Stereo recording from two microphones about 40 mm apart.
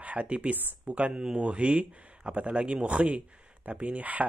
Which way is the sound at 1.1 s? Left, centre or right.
Centre.